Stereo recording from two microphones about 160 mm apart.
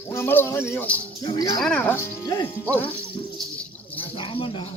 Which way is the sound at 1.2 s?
25° left (ahead or behind).